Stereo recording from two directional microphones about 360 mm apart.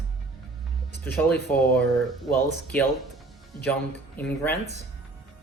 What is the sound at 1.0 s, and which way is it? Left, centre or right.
Speech, centre.